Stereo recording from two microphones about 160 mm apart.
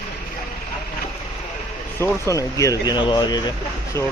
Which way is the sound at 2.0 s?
20° left (ahead or behind).